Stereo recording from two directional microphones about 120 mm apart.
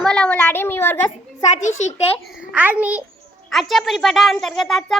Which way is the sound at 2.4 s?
10° right (ahead or behind).